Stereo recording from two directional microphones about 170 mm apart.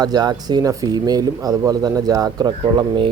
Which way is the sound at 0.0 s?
25° right (ahead or behind).